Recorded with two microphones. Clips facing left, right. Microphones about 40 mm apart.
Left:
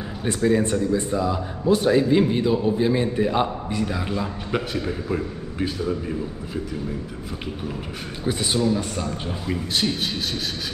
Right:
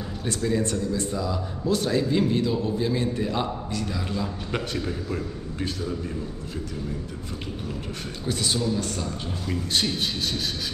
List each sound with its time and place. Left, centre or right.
0.2 s speech: left
4.5 s a man's voice: centre
8.3 s speech: left
9.8 s a man's voice: centre